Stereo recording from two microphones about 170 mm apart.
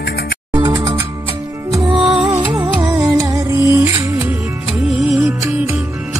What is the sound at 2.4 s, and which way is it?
Music, 30° right (ahead or behind).